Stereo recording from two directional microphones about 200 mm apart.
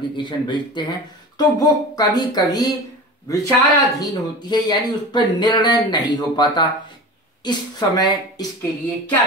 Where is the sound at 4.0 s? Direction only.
20° left (ahead or behind).